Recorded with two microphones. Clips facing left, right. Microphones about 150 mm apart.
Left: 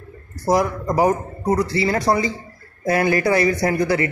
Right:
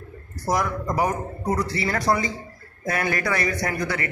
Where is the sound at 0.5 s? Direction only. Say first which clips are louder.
Left 5 dB; 30° left (ahead or behind).